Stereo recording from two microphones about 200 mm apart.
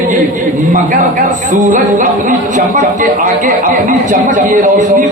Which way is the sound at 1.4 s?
40° right (ahead or behind).